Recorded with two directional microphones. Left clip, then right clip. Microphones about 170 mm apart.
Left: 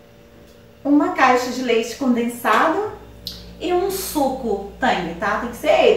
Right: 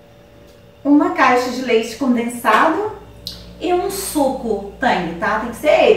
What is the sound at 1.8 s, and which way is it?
Speech, centre (ahead or behind).